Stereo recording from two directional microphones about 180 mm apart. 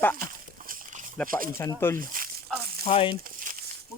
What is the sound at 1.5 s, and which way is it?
Speech, 15° left (ahead or behind).